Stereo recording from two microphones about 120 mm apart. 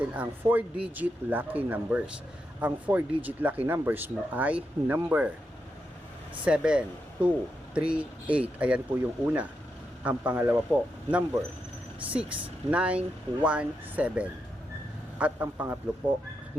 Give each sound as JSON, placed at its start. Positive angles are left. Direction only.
{"t": 0.0, "sound": "speech", "side_deg": -15}
{"t": 6.4, "sound": "speech", "side_deg": -10}